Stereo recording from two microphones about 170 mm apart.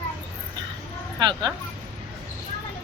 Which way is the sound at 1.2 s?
25° right (ahead or behind).